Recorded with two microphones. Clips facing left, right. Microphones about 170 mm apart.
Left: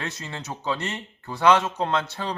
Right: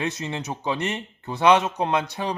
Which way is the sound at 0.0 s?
20° right (ahead or behind).